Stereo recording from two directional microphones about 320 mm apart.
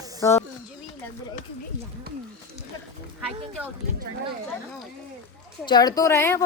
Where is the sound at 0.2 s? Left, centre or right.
Centre.